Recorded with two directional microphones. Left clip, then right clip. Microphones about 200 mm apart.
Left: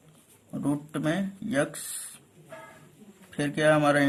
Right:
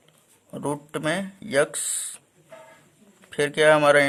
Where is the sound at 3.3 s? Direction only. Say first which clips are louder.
Right 6 dB; 45° right (ahead or behind).